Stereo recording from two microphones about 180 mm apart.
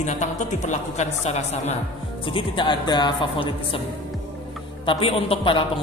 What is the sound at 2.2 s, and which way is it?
A man's voice, 30° left (ahead or behind).